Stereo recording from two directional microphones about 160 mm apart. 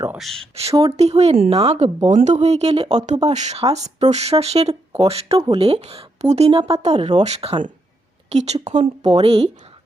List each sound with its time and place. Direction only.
0.2 s speech: centre (ahead or behind)
0.8 s a woman's voice: 35° right (ahead or behind)